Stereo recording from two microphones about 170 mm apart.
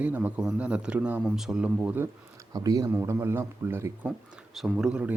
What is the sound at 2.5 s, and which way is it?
A man's voice, 20° right (ahead or behind).